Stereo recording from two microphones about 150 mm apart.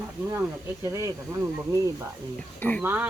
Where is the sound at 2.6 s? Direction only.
10° left (ahead or behind).